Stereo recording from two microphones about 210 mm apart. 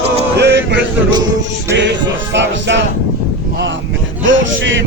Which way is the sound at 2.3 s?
60° right (ahead or behind).